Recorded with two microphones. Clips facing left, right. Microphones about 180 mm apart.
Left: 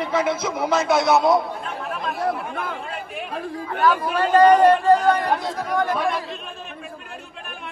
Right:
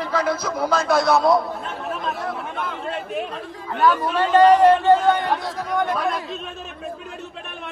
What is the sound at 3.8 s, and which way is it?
Speech, centre (ahead or behind).